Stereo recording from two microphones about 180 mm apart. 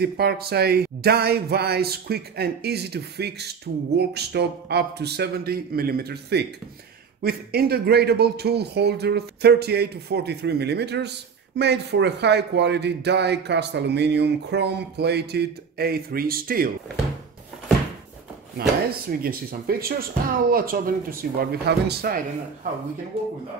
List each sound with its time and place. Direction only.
0.0 s speech: 60° right (ahead or behind)
18.9 s speech: 55° right (ahead or behind)